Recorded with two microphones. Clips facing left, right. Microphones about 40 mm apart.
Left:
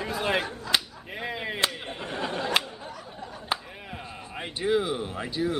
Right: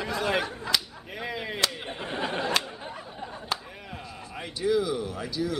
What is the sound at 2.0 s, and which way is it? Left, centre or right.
Chatter, centre.